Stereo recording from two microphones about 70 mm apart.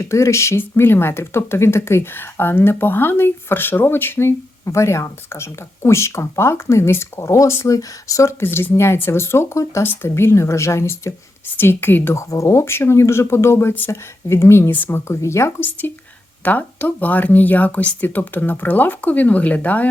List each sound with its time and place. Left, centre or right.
0.0 s speech: left
9.8 s speech: left
11.5 s speech: left
12.1 s speech: left
14.7 s speech: left
16.4 s speech: left